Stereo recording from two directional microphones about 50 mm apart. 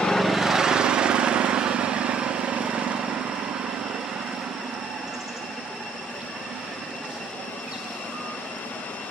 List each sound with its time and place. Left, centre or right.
0.0 s vehicle: centre; by 3.1 s right